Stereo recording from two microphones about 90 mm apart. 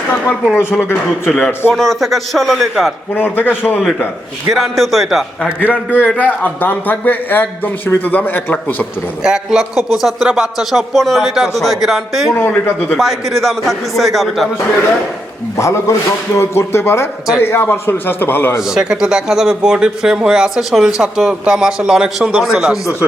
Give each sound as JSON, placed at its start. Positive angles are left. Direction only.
{"t": 0.8, "sound": "a man's voice", "side_deg": 25}
{"t": 1.7, "sound": "a man's voice", "side_deg": 0}
{"t": 3.2, "sound": "a man's voice", "side_deg": 20}
{"t": 3.8, "sound": "a man's voice", "side_deg": 5}
{"t": 5.6, "sound": "a man's voice", "side_deg": 20}
{"t": 9.2, "sound": "a man's voice", "side_deg": -5}
{"t": 12.3, "sound": "a man's voice", "side_deg": 25}
{"t": 13.0, "sound": "a man's voice", "side_deg": 0}
{"t": 15.5, "sound": "a man's voice", "side_deg": 35}
{"t": 18.6, "sound": "a man's voice", "side_deg": -5}